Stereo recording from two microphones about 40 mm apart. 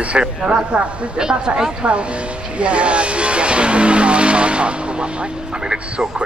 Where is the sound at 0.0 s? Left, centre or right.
Right.